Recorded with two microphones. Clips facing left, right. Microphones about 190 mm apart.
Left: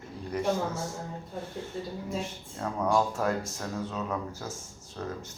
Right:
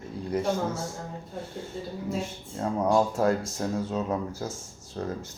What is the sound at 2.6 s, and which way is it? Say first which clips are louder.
Speech: right 3 dB; 25° right (ahead or behind).